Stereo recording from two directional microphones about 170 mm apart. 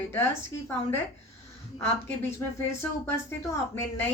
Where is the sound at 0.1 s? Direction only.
15° left (ahead or behind).